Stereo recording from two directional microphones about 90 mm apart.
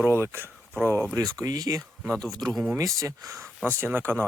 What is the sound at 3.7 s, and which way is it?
Speech, 25° right (ahead or behind).